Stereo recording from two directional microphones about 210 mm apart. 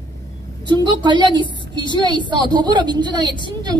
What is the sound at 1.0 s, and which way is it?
A woman's voice, 20° right (ahead or behind).